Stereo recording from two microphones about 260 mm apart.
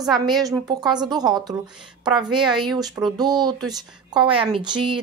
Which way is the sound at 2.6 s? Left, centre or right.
Centre.